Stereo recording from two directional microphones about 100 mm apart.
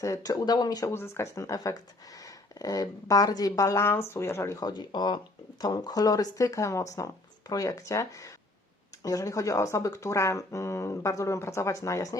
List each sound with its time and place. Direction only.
0.0 s speech: 35° left (ahead or behind)
0.9 s speech: 25° left (ahead or behind)
4.6 s speech: 45° left (ahead or behind)